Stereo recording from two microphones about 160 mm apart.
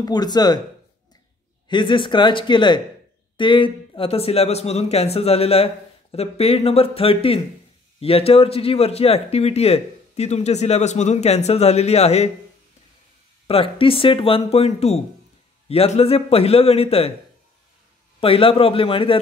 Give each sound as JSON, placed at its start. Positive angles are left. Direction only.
{"t": 0.0, "sound": "speech", "side_deg": 25}
{"t": 1.7, "sound": "speech", "side_deg": 30}
{"t": 13.5, "sound": "speech", "side_deg": 35}
{"t": 18.2, "sound": "speech", "side_deg": 35}